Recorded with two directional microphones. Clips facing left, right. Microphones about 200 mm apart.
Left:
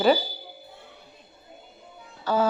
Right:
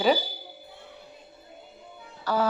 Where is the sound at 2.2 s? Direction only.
25° left (ahead or behind).